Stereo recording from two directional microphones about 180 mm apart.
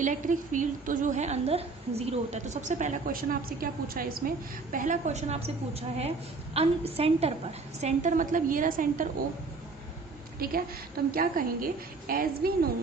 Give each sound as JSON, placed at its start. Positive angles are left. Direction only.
{"t": 0.0, "sound": "a woman's voice", "side_deg": -45}
{"t": 11.1, "sound": "a woman's voice", "side_deg": -55}